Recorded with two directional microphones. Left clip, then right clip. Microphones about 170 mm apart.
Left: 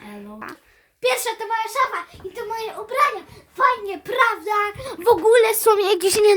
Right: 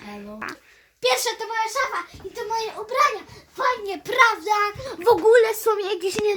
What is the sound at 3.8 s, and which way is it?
Speech, 20° right (ahead or behind).